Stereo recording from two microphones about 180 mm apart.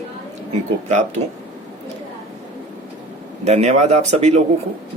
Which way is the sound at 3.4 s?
40° right (ahead or behind).